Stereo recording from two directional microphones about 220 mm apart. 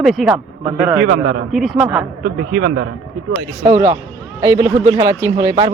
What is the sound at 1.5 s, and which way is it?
Speech, centre (ahead or behind).